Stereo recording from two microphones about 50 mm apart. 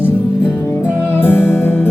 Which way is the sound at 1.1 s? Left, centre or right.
Left.